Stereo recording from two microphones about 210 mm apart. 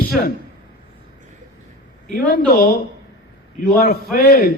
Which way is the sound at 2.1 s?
45° left (ahead or behind).